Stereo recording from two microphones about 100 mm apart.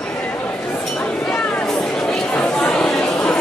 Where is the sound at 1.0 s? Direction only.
10° left (ahead or behind).